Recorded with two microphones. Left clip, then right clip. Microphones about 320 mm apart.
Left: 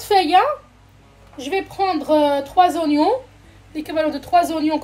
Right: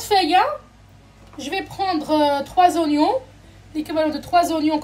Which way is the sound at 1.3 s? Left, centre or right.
Left.